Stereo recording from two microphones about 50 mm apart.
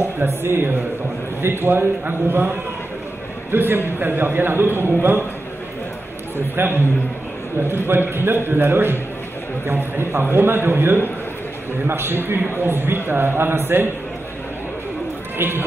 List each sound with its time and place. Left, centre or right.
0.2 s a man's voice: right
3.5 s a man's voice: right
6.3 s a man's voice: right
15.3 s speech: right